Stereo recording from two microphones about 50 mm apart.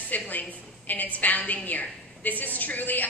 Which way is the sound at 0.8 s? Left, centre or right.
Left.